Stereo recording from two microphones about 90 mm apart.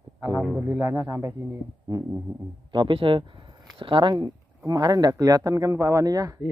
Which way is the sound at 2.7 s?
65° right (ahead or behind).